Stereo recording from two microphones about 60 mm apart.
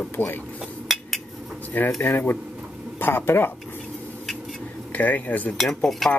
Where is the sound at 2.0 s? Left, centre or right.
Left.